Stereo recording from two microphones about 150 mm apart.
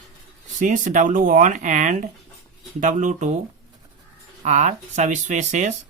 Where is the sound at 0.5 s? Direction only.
60° right (ahead or behind).